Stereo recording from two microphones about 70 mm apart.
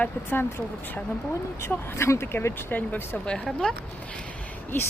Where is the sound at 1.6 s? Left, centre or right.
Left.